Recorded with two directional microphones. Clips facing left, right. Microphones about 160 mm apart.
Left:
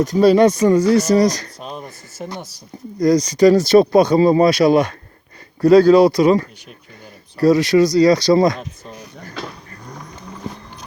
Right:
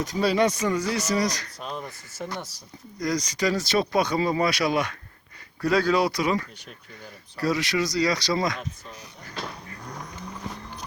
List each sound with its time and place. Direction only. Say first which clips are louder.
0.0 s speech: left 10 dB; 40° left (ahead or behind)
1.6 s speech: right 1 dB; 15° left (ahead or behind)
3.0 s speech: left 13 dB; 35° left (ahead or behind)